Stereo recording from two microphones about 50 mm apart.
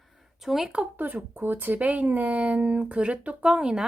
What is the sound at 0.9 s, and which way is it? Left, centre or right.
Speech, right.